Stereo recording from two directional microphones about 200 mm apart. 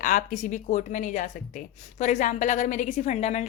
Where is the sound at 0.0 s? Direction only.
40° left (ahead or behind).